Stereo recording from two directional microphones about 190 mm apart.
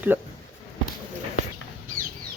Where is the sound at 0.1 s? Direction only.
10° right (ahead or behind).